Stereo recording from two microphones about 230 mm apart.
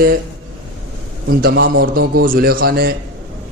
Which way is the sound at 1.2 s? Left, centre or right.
Right.